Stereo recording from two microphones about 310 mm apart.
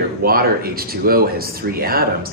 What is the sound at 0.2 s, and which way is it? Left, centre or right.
Speech, right.